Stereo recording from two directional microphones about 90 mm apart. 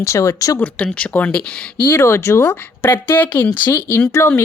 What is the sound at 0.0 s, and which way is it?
Speech, 30° left (ahead or behind).